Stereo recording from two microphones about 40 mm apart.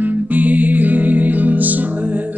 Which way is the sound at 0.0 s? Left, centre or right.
Right.